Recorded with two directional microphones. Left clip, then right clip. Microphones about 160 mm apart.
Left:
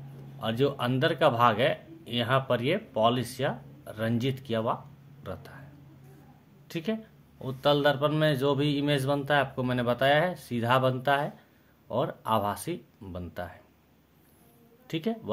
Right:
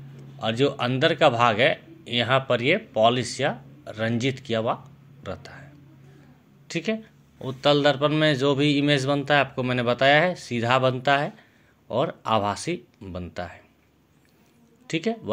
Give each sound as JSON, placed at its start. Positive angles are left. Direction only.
{"t": 0.4, "sound": "speech", "side_deg": -15}
{"t": 6.7, "sound": "speech", "side_deg": -15}
{"t": 14.9, "sound": "speech", "side_deg": -20}